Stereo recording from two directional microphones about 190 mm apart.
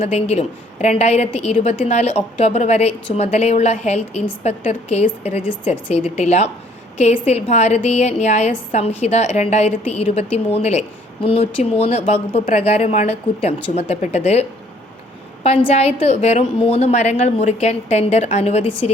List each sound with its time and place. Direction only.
0.0 s a woman's voice: 35° left (ahead or behind)
5.4 s a woman's voice: 5° right (ahead or behind)
6.1 s a woman's voice: 35° left (ahead or behind)
15.4 s a woman's voice: 35° left (ahead or behind)